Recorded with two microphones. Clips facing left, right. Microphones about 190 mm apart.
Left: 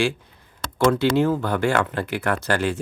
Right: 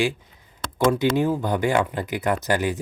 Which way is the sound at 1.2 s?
15° right (ahead or behind).